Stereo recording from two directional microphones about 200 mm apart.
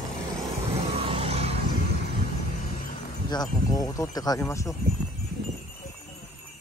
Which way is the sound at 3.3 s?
20° left (ahead or behind).